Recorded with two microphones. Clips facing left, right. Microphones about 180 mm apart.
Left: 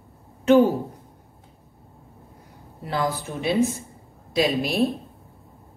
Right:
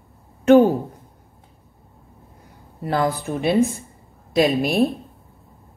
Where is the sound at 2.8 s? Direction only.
55° right (ahead or behind).